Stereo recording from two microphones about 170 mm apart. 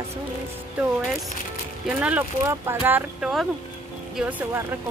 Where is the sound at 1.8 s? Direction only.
10° right (ahead or behind).